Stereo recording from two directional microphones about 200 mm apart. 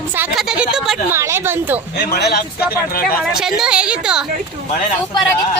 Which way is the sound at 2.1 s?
50° left (ahead or behind).